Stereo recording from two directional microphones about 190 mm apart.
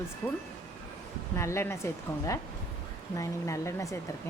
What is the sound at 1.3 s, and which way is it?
Speech, 15° left (ahead or behind).